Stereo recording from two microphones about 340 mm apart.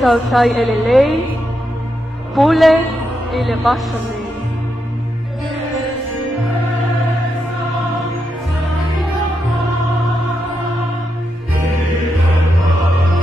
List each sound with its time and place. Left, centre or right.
0.0 s a woman's voice: centre
2.3 s a woman's voice: centre